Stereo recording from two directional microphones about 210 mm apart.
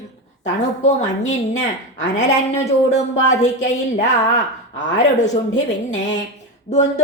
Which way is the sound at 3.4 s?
35° left (ahead or behind).